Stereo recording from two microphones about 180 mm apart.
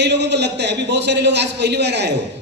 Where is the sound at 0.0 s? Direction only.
70° right (ahead or behind).